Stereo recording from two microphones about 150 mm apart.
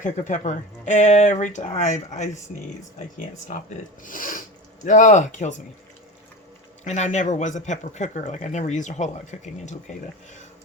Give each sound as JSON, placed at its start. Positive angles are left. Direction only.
{"t": 0.0, "sound": "speech", "side_deg": 55}
{"t": 4.0, "sound": "speech", "side_deg": 60}
{"t": 6.8, "sound": "speech", "side_deg": 50}